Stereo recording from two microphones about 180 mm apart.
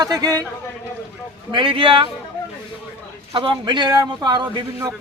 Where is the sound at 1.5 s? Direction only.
25° right (ahead or behind).